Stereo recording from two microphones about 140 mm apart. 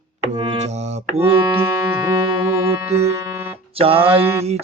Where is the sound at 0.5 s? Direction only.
50° right (ahead or behind).